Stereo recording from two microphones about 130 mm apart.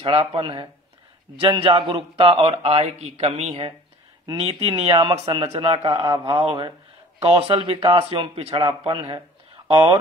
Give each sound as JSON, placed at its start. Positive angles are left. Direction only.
{"t": 0.0, "sound": "a man's voice", "side_deg": -45}
{"t": 4.3, "sound": "speech", "side_deg": -40}